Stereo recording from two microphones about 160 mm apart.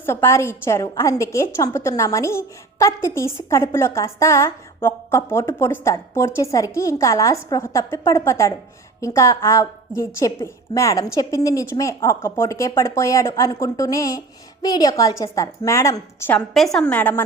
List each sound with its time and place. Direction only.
0.0 s a woman's voice: 15° left (ahead or behind)
16.6 s a woman's voice: 5° left (ahead or behind)